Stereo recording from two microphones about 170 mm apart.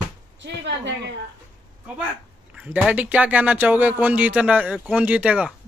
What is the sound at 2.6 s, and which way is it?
Speech, 10° right (ahead or behind).